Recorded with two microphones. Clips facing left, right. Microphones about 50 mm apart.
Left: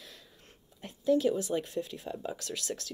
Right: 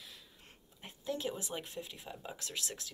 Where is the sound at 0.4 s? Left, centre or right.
Centre.